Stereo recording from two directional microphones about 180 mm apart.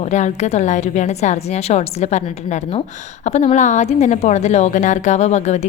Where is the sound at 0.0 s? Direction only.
40° left (ahead or behind).